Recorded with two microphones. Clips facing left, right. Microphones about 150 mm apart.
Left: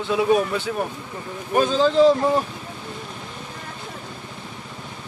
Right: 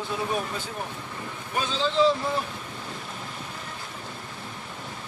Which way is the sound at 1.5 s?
50° left (ahead or behind).